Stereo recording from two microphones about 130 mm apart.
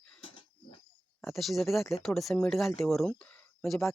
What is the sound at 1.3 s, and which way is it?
Speech, centre (ahead or behind).